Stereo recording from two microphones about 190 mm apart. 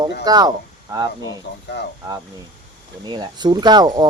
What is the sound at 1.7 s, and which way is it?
Speech, 60° left (ahead or behind).